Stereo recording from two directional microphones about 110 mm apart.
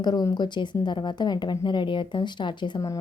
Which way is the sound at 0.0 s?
35° left (ahead or behind).